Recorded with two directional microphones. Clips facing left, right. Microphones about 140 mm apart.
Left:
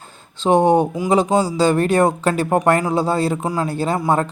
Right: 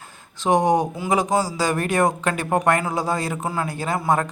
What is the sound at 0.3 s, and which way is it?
Speech, 30° left (ahead or behind).